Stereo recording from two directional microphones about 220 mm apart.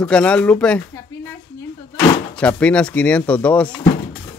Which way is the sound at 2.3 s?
5° left (ahead or behind).